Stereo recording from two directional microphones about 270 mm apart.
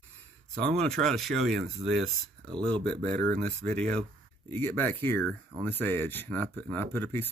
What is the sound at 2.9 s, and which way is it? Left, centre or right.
Speech, right.